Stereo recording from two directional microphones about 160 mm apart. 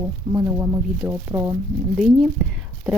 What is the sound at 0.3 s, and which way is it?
Speech, 20° right (ahead or behind).